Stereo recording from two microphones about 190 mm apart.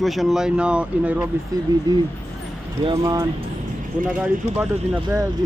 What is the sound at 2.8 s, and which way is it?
Speech, 20° right (ahead or behind).